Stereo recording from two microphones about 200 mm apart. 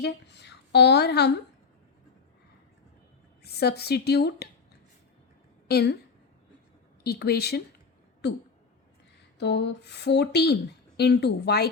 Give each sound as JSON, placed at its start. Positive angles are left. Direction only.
{"t": 0.0, "sound": "a woman's voice", "side_deg": 60}
{"t": 3.4, "sound": "a woman's voice", "side_deg": 55}
{"t": 5.6, "sound": "a woman's voice", "side_deg": 55}
{"t": 7.0, "sound": "a woman's voice", "side_deg": 50}
{"t": 9.4, "sound": "a woman's voice", "side_deg": 60}